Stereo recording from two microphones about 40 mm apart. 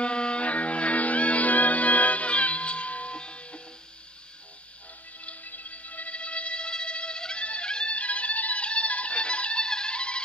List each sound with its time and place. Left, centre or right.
0.0 s music: left
5.2 s music: left